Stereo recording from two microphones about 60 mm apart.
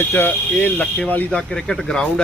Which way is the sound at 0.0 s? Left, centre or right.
Left.